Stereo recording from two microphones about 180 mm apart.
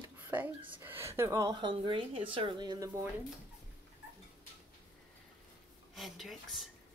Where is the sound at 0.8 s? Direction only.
15° right (ahead or behind).